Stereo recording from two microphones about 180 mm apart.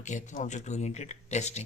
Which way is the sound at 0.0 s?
40° left (ahead or behind).